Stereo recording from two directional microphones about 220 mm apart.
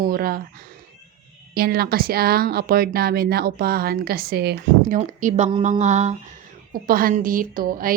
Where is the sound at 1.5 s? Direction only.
45° right (ahead or behind).